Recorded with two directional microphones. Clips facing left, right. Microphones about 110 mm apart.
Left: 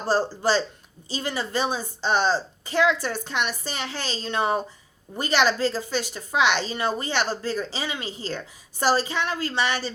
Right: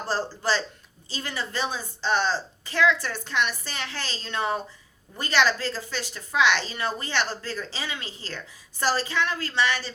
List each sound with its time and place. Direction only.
0.0 s a woman's voice: 15° left (ahead or behind)